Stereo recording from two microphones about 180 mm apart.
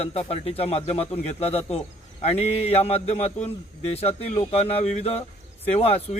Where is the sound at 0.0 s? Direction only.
35° left (ahead or behind).